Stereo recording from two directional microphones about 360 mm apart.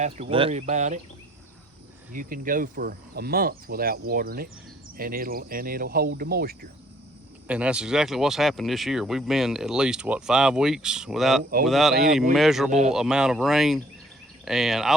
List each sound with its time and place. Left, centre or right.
0.0 s speech: centre
2.1 s speech: right
7.4 s speech: centre